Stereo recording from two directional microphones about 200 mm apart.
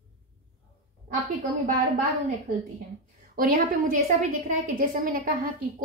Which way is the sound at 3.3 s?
45° right (ahead or behind).